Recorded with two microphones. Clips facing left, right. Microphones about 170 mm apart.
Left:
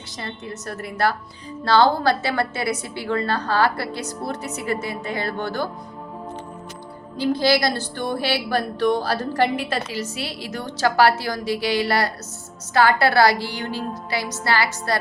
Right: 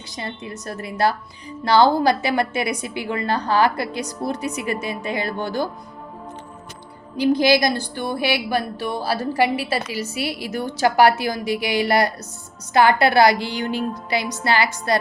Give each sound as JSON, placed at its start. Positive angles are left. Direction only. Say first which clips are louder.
{"t": 0.2, "sound": "a woman's voice", "louder": "right 1 dB", "side_deg": -15}
{"t": 7.2, "sound": "a woman's voice", "louder": "right 3 dB", "side_deg": -15}